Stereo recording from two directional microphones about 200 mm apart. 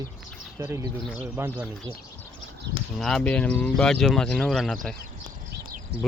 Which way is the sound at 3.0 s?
5° left (ahead or behind).